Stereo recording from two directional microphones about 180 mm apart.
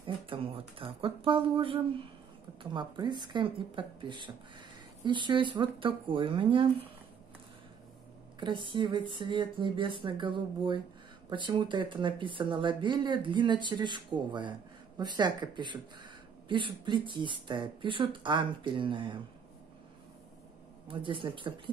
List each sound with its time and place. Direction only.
0.0 s speech: 30° right (ahead or behind)
8.4 s speech: 25° right (ahead or behind)
20.9 s speech: 30° right (ahead or behind)